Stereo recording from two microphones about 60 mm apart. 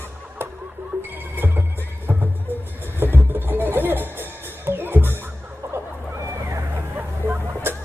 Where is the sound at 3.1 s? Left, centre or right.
Right.